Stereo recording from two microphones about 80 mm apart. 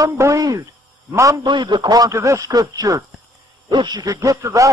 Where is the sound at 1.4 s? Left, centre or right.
Right.